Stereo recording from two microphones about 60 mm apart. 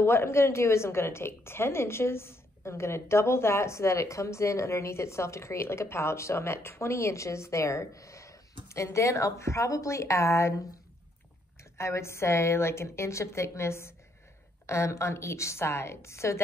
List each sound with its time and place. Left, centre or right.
0.0 s a woman's voice: left
11.8 s a woman's voice: left